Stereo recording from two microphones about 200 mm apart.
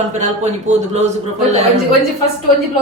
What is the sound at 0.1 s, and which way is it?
Speech, 35° right (ahead or behind).